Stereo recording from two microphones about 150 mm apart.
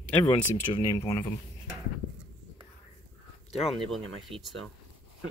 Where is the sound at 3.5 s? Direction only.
40° left (ahead or behind).